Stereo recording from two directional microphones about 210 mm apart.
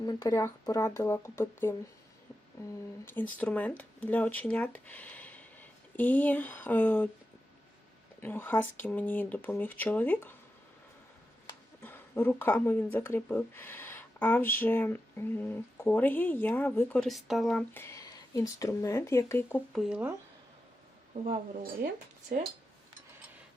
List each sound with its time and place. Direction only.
0.0 s speech: 20° left (ahead or behind)
3.3 s speech: 5° left (ahead or behind)
8.2 s speech: 10° left (ahead or behind)
11.8 s speech: 10° left (ahead or behind)
19.7 s speech: 5° right (ahead or behind)
21.1 s a woman's voice: 40° right (ahead or behind)